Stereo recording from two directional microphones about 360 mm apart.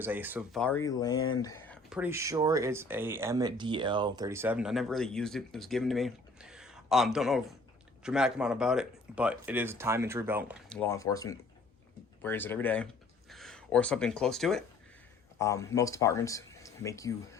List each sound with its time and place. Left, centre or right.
0.0 s speech: centre